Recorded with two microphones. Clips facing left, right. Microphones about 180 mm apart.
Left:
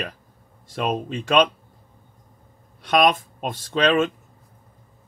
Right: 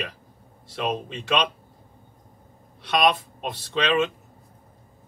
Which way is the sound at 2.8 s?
45° left (ahead or behind).